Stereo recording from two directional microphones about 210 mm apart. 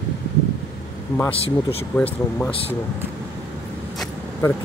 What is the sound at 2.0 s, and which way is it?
Speech, 5° left (ahead or behind).